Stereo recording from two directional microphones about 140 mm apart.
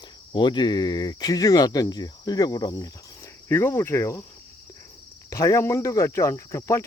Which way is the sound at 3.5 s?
15° left (ahead or behind).